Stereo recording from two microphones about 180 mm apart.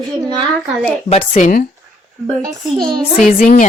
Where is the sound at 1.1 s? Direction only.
35° left (ahead or behind).